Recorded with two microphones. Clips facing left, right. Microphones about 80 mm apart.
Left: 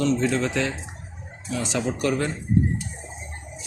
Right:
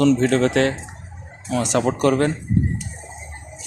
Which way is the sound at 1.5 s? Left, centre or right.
Right.